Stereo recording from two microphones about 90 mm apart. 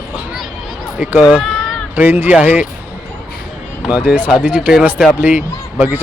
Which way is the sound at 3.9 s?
15° right (ahead or behind).